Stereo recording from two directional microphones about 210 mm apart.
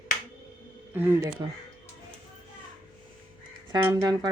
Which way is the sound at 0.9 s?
15° right (ahead or behind).